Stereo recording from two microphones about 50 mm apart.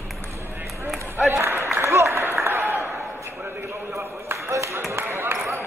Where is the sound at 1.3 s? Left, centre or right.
Right.